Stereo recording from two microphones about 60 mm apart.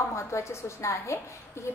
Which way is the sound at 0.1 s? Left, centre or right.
Left.